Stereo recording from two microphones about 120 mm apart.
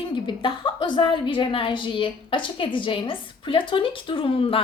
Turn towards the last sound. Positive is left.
turn(degrees=50)  # may be behind; listen again after turning